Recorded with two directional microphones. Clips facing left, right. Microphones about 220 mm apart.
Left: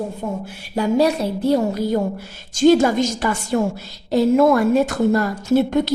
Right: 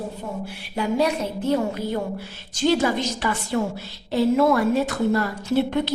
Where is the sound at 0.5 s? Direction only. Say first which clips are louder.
Left 5 dB; 40° left (ahead or behind).